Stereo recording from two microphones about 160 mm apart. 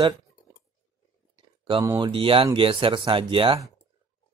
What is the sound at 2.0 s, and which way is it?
Speech, 35° right (ahead or behind).